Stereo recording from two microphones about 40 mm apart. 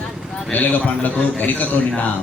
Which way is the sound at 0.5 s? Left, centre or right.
Left.